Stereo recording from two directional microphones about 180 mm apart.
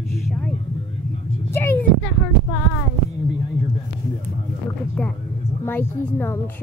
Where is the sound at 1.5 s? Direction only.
10° left (ahead or behind).